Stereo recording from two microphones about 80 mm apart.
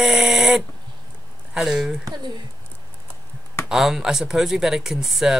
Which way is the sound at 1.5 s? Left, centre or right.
Centre.